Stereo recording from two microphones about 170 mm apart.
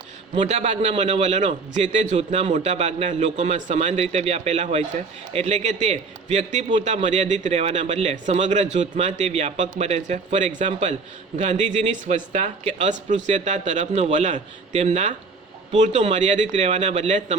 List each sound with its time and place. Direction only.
0.3 s a man's voice: 35° right (ahead or behind)
6.7 s speech: 30° right (ahead or behind)
6.9 s speech: 40° right (ahead or behind)